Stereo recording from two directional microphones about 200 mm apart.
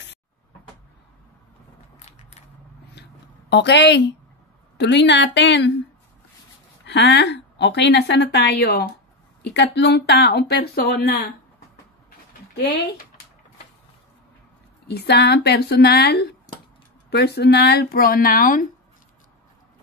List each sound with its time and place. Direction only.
2.0 s mechanisms: 35° left (ahead or behind)
2.9 s a sound: 60° left (ahead or behind)
4.7 s a woman's voice: 60° left (ahead or behind)
6.9 s a woman's voice: 60° left (ahead or behind)
12.5 s speech: 50° left (ahead or behind)
14.9 s speech: 55° left (ahead or behind)